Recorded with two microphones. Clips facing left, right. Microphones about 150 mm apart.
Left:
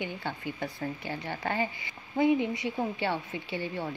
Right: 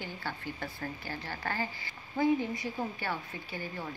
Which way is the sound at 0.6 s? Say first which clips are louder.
Left 5 dB; 20° left (ahead or behind).